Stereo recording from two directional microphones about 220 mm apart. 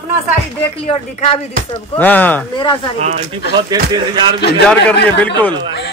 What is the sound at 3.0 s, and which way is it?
Speech, 30° right (ahead or behind).